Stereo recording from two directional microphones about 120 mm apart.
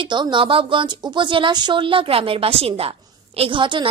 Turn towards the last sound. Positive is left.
turn(degrees=-45)  # may be behind; listen again after turning